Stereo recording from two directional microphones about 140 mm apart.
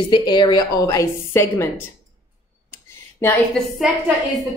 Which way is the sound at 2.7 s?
15° left (ahead or behind).